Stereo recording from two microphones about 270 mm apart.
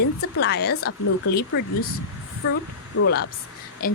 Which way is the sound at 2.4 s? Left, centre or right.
Left.